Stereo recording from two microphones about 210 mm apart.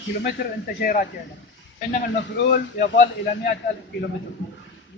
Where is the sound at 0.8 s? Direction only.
40° left (ahead or behind).